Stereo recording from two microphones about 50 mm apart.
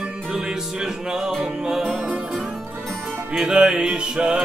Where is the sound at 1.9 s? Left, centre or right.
Right.